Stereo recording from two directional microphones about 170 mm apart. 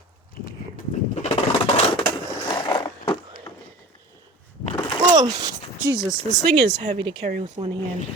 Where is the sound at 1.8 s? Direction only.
30° left (ahead or behind).